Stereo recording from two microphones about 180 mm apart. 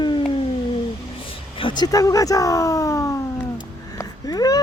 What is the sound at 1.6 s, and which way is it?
Speech, 25° left (ahead or behind).